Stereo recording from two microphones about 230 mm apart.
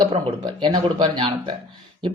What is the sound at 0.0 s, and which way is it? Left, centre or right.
Speech, right.